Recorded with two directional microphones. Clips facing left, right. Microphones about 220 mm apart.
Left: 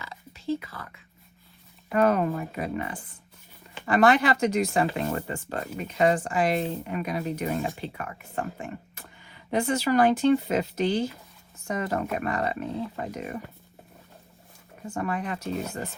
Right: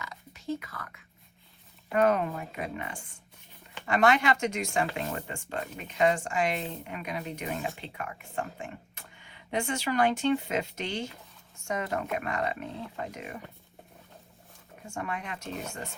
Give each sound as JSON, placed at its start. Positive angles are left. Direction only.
{"t": 0.0, "sound": "oink", "side_deg": 30}
{"t": 2.0, "sound": "speech", "side_deg": 40}
{"t": 14.8, "sound": "speech", "side_deg": 35}